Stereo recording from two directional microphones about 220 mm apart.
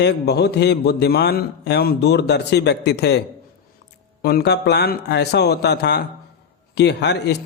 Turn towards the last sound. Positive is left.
turn(degrees=50)  # may be behind; listen again after turning